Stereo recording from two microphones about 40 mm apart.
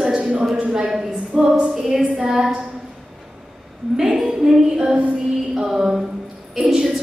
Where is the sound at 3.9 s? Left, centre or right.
Centre.